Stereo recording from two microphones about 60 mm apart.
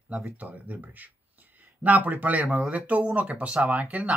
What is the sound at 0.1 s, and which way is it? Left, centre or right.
Speech, right.